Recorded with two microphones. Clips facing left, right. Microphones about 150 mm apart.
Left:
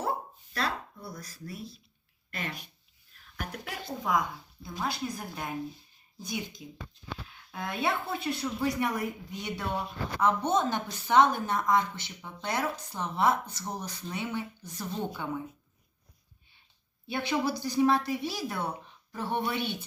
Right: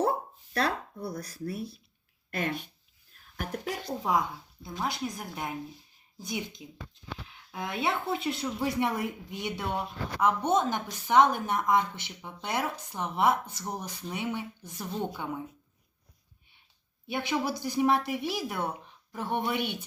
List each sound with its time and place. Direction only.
0.0 s dog: 55° right (ahead or behind)
1.0 s speech: 60° right (ahead or behind); by 4.2 s 35° right (ahead or behind)
4.8 s a woman's voice: 20° right (ahead or behind)
17.1 s a woman's voice: 15° right (ahead or behind)